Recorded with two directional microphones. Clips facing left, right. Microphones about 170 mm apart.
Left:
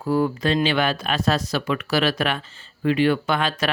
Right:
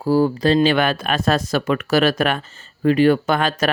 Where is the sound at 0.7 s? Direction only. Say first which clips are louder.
Right 3 dB; 55° right (ahead or behind).